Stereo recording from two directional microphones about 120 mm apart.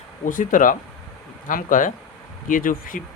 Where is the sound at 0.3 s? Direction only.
90° left.